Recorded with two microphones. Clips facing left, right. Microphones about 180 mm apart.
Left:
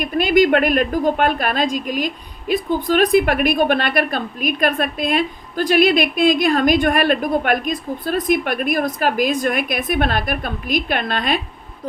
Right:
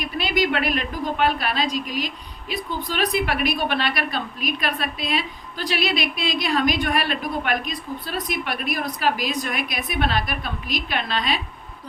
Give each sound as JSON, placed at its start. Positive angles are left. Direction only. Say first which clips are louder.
{"t": 0.0, "sound": "a woman's voice", "louder": "left 8 dB", "side_deg": 50}